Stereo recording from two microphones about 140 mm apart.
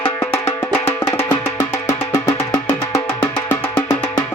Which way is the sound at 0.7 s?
15° left (ahead or behind).